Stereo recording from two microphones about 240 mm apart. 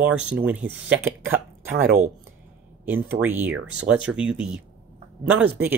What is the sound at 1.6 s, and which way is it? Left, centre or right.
Speech, right.